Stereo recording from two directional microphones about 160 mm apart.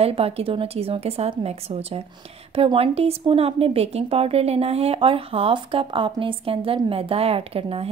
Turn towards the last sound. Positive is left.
turn(degrees=-35)  # may be behind; listen again after turning